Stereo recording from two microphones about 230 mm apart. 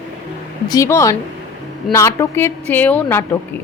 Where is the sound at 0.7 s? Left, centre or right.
Centre.